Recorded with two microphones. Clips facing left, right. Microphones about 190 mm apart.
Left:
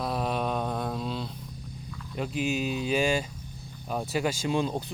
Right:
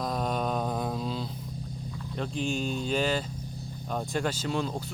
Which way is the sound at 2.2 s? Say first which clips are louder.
Left 2 dB; 5° left (ahead or behind).